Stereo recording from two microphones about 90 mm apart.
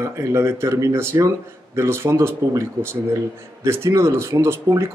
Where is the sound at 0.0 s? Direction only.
30° right (ahead or behind).